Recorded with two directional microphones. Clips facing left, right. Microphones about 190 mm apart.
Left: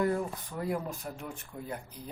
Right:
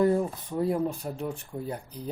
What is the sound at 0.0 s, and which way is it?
Speech, 30° right (ahead or behind).